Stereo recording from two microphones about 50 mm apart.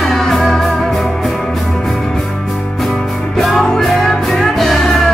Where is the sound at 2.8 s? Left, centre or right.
Centre.